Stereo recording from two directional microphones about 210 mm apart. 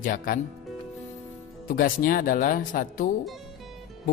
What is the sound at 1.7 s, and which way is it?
A man's voice, 40° left (ahead or behind).